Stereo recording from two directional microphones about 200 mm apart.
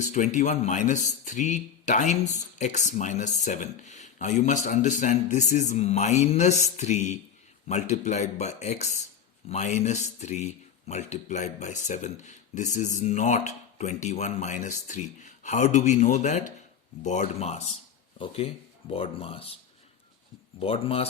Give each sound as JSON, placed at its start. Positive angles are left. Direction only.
{"t": 0.0, "sound": "speech", "side_deg": 40}
{"t": 20.6, "sound": "speech", "side_deg": 30}